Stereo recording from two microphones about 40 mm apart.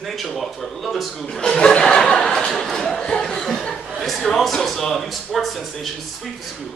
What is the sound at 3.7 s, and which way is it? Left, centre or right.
Speech, centre.